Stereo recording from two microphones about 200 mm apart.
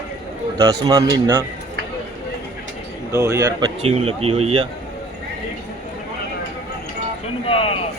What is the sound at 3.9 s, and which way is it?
Speech, 30° right (ahead or behind).